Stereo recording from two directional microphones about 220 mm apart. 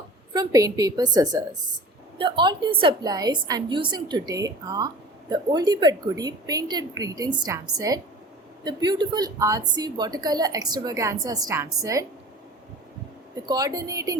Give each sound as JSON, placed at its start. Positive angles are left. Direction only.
{"t": 0.3, "sound": "a woman's voice", "side_deg": -15}
{"t": 13.3, "sound": "a woman's voice", "side_deg": -15}